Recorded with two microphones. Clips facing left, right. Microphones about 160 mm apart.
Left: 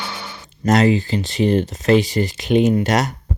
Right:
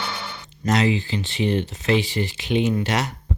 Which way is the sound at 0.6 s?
45° left (ahead or behind).